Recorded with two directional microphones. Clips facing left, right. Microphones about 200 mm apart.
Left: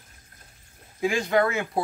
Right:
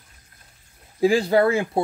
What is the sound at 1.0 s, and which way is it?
Speech, 30° right (ahead or behind).